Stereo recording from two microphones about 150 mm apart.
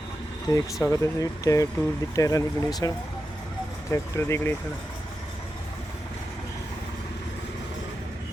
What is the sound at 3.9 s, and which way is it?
Speech, 20° left (ahead or behind).